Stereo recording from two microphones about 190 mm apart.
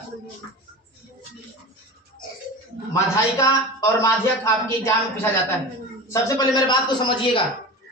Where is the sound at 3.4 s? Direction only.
15° left (ahead or behind).